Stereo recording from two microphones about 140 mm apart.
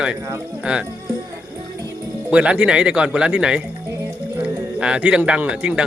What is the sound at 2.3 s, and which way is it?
A man's voice, 10° right (ahead or behind).